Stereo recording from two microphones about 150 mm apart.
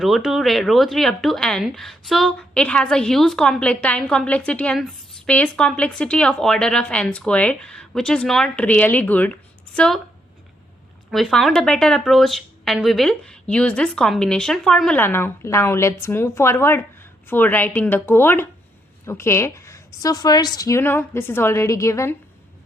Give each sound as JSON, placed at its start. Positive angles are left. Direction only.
{"t": 0.0, "sound": "speech", "side_deg": 0}
{"t": 11.1, "sound": "a woman's voice", "side_deg": 0}